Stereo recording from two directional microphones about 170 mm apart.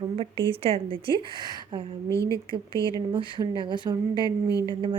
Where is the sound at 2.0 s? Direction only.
15° left (ahead or behind).